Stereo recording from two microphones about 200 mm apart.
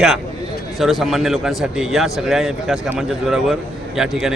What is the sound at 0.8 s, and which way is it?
A man's voice, centre (ahead or behind).